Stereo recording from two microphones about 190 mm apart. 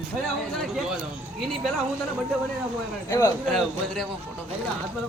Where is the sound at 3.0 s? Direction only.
15° left (ahead or behind).